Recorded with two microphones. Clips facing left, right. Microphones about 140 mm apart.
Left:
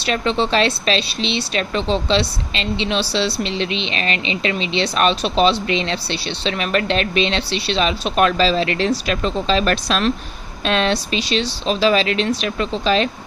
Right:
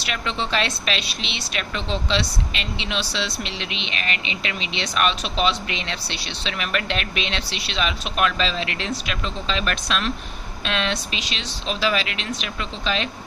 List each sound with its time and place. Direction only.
0.0 s speech: 30° left (ahead or behind)